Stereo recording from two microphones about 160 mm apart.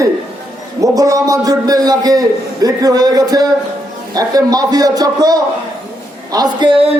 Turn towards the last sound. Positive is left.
turn(degrees=-35)  # may be behind; listen again after turning